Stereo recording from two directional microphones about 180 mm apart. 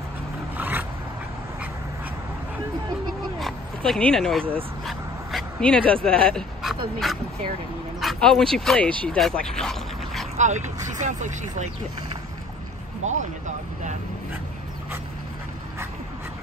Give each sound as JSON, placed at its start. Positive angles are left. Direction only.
{"t": 0.6, "sound": "a sound", "side_deg": -10}
{"t": 3.3, "sound": "dog", "side_deg": 0}
{"t": 4.8, "sound": "vehicle", "side_deg": 5}
{"t": 6.0, "sound": "speech", "side_deg": 5}
{"t": 8.0, "sound": "speech", "side_deg": 0}
{"t": 10.3, "sound": "speech", "side_deg": -40}
{"t": 13.0, "sound": "speech", "side_deg": -40}